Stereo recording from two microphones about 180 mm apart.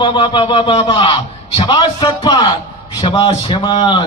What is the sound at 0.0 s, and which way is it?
A man's voice, 25° left (ahead or behind).